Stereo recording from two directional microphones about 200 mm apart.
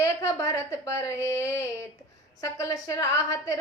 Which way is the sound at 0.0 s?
15° left (ahead or behind).